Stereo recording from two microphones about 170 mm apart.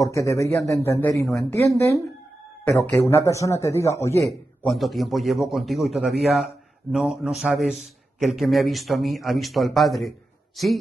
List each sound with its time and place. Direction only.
0.0 s a man's voice: 20° left (ahead or behind)
4.6 s a man's voice: centre (ahead or behind)